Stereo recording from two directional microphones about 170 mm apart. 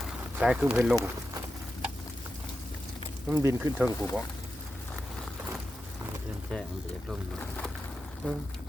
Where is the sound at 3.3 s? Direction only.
15° right (ahead or behind).